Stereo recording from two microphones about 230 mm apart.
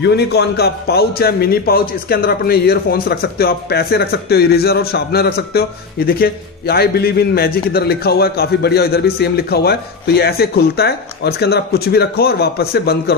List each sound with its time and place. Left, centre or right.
0.0 s a man's voice: left